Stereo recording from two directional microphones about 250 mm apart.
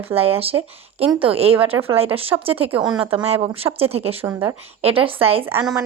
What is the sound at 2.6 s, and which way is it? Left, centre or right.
Speech, centre.